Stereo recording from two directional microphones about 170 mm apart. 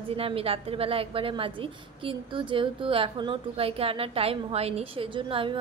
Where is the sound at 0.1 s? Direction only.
35° right (ahead or behind).